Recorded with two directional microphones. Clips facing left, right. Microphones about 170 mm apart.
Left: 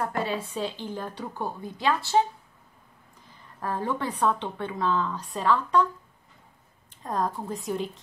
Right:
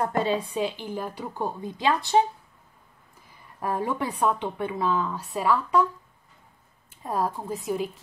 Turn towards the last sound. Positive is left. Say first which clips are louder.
# right 2 dB
turn(degrees=-5)  # may be behind; listen again after turning